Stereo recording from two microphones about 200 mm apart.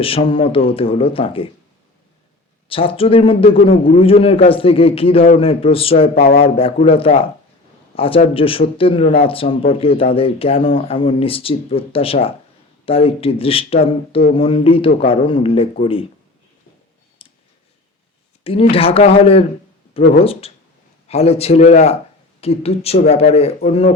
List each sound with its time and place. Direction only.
0.0 s a man's voice: 30° left (ahead or behind)
2.6 s a man's voice: 30° left (ahead or behind)
6.1 s speech: 50° left (ahead or behind)
6.4 s a man's voice: 30° left (ahead or behind)
17.2 s clicking: 25° left (ahead or behind)
18.4 s a man's voice: 30° left (ahead or behind)